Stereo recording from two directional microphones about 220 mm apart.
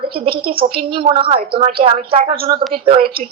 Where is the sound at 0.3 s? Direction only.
25° right (ahead or behind).